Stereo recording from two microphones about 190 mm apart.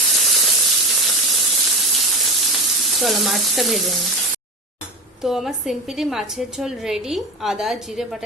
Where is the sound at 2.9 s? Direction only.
Centre (ahead or behind).